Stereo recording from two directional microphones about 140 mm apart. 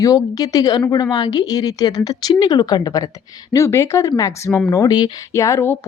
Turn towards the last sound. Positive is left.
turn(degrees=20)  # may be behind; listen again after turning